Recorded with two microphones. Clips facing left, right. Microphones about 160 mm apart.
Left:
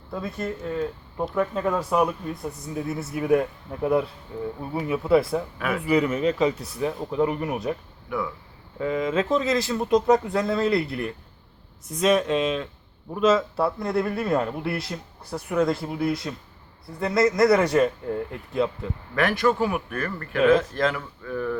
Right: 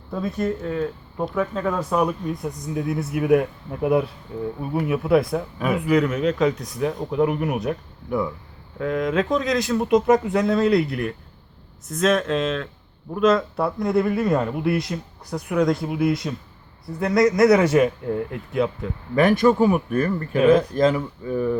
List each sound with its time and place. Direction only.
0.1 s speech: centre (ahead or behind)
5.5 s speech: 15° right (ahead or behind)
5.8 s speech: 5° left (ahead or behind)
8.8 s speech: centre (ahead or behind)
19.4 s speech: 15° right (ahead or behind)
19.6 s speech: 40° right (ahead or behind)
20.1 s speech: 20° right (ahead or behind)